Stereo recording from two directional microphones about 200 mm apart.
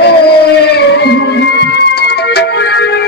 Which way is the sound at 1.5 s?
55° left (ahead or behind).